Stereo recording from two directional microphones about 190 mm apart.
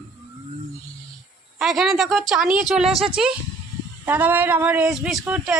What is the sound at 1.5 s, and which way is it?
Speech, centre (ahead or behind).